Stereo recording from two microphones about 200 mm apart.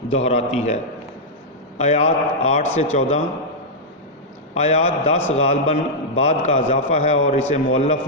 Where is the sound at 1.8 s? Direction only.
35° left (ahead or behind).